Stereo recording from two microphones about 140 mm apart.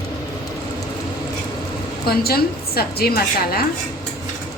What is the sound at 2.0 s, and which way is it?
A woman's voice, 90° left.